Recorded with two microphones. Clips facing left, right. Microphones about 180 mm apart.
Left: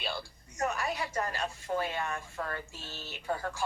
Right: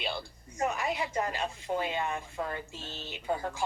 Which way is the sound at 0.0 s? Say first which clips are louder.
Right 2 dB; 20° right (ahead or behind).